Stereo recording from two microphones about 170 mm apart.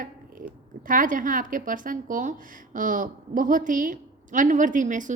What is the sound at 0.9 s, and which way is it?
A woman's voice, 50° right (ahead or behind).